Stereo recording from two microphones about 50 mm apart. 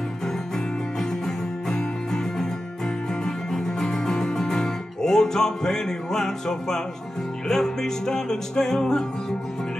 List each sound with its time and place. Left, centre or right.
1.2 s music: centre